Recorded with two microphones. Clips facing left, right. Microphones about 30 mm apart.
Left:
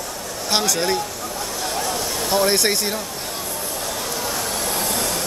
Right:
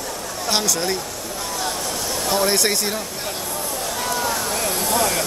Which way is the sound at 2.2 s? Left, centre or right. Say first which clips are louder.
Left 1 dB; centre.